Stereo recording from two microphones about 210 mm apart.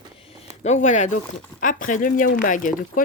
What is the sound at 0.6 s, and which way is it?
Speech, 35° left (ahead or behind).